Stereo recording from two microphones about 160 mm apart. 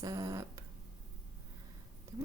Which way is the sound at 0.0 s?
20° right (ahead or behind).